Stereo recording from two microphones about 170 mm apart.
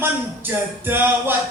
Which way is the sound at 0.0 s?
10° right (ahead or behind).